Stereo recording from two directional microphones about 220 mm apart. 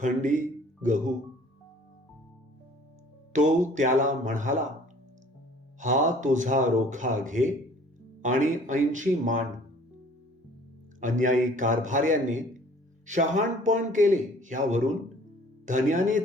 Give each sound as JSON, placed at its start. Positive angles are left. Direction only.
{"t": 0.0, "sound": "speech", "side_deg": -35}
{"t": 3.3, "sound": "a man's voice", "side_deg": -35}
{"t": 5.8, "sound": "a man's voice", "side_deg": -35}
{"t": 11.0, "sound": "a man's voice", "side_deg": -35}